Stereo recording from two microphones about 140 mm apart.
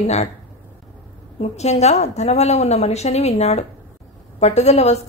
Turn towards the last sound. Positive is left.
turn(degrees=50)  # may be behind; listen again after turning